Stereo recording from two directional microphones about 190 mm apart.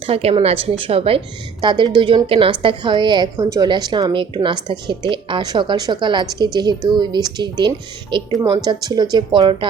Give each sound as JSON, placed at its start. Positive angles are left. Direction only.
{"t": 0.0, "sound": "a woman's voice", "side_deg": -30}